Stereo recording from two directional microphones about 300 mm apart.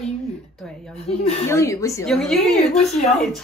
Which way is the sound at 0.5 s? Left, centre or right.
Centre.